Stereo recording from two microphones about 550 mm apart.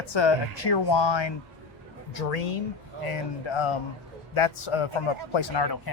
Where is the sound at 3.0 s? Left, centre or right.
Left.